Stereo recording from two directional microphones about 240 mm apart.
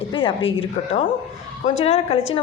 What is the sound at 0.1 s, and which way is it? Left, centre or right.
A woman's voice, left.